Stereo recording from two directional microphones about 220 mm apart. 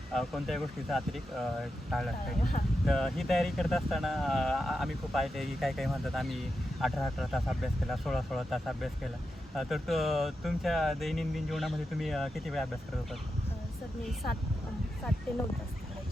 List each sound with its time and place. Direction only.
0.1 s speech: centre (ahead or behind)